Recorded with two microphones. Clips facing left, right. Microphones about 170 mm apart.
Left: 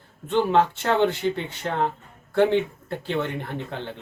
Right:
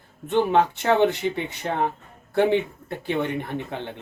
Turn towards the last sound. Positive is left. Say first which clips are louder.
# right 1 dB
turn(degrees=-15)  # may be behind; listen again after turning